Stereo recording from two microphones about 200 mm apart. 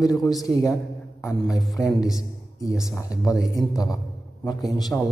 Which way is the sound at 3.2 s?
15° left (ahead or behind).